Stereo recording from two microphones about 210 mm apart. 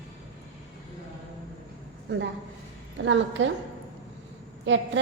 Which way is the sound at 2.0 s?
60° right (ahead or behind).